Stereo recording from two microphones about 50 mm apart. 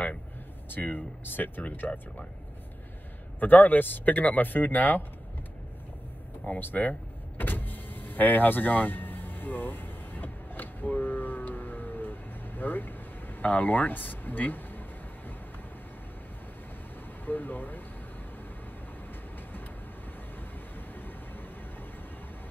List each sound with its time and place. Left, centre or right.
0.7 s speech: left
3.3 s speech: left
6.6 s power windows: left
17.2 s speech: left